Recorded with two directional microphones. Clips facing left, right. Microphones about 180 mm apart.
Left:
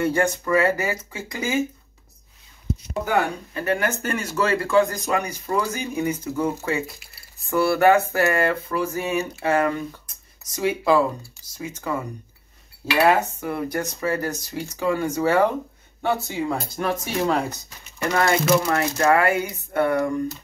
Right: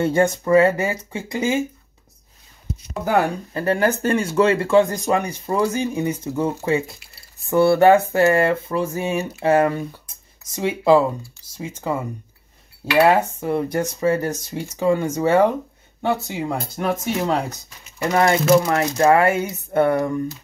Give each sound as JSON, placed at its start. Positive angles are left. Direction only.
{"t": 0.0, "sound": "speech", "side_deg": -25}
{"t": 3.5, "sound": "speech", "side_deg": -30}
{"t": 13.1, "sound": "speech", "side_deg": -25}